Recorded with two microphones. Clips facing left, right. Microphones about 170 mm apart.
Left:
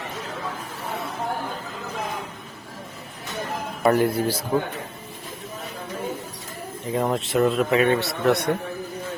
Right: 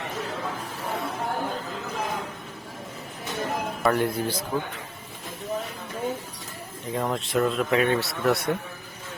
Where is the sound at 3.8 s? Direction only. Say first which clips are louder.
Left 5 dB; 10° left (ahead or behind).